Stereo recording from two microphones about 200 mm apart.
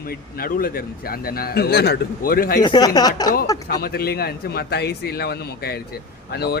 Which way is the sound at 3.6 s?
50° left (ahead or behind).